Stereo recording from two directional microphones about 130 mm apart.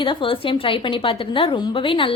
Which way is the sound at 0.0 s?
40° left (ahead or behind).